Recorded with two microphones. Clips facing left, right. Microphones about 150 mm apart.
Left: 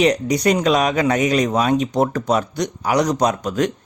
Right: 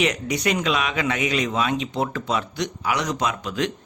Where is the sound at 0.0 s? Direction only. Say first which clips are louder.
Left 6 dB; 35° left (ahead or behind).